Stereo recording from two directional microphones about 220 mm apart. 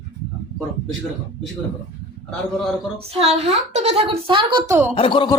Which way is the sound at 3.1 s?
30° right (ahead or behind).